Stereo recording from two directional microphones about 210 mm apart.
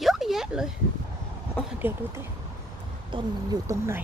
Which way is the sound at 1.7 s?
10° right (ahead or behind).